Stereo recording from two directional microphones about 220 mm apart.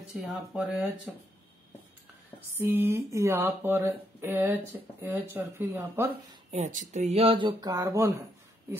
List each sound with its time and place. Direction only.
0.1 s speech: centre (ahead or behind)
2.5 s speech: 10° right (ahead or behind)
6.5 s speech: 35° right (ahead or behind); by 8.1 s 15° right (ahead or behind)